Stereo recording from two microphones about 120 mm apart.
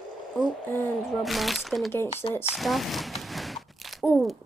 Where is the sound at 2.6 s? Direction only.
Centre (ahead or behind).